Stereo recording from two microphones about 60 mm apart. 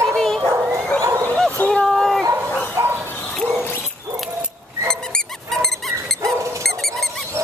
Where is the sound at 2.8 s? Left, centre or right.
Right.